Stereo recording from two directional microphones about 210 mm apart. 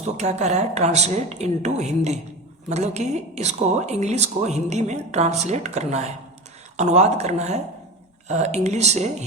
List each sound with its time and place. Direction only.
0.0 s speech: 30° right (ahead or behind)